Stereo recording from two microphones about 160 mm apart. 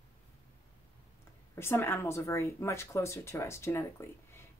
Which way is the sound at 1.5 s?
15° left (ahead or behind).